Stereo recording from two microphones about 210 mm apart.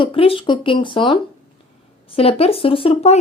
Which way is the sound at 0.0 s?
25° left (ahead or behind).